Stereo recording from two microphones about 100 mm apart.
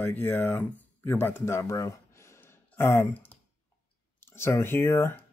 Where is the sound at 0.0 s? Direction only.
20° left (ahead or behind).